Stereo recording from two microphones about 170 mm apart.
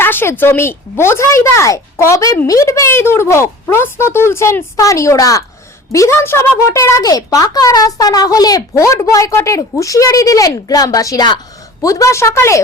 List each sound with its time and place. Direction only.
0.0 s a woman's voice: 15° left (ahead or behind)